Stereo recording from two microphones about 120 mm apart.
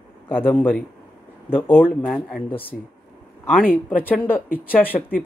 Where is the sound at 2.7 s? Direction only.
Centre (ahead or behind).